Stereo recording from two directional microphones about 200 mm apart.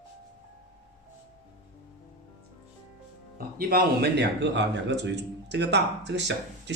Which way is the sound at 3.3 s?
50° right (ahead or behind).